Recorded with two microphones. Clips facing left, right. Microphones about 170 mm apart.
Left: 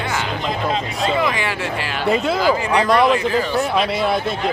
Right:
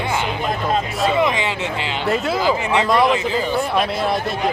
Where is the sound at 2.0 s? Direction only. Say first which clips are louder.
Left 2 dB; centre (ahead or behind).